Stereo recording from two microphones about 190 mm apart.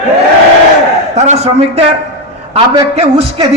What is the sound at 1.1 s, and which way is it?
A man's voice, 35° right (ahead or behind).